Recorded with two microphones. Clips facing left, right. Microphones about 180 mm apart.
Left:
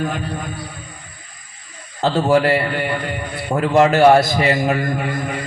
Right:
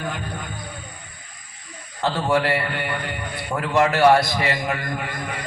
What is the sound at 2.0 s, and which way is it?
A man's voice, 25° left (ahead or behind).